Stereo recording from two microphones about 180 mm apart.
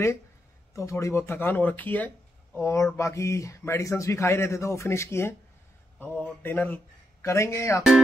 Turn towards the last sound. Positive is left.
turn(degrees=15)  # may be behind; listen again after turning